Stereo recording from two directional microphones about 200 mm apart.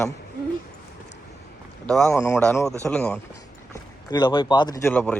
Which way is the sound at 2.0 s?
15° left (ahead or behind).